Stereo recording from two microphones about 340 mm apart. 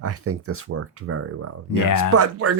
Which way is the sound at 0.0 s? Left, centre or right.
Right.